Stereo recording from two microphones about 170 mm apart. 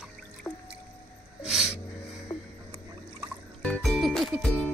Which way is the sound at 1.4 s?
5° right (ahead or behind).